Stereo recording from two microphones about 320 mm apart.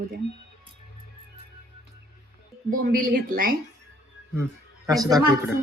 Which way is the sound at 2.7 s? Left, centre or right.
Right.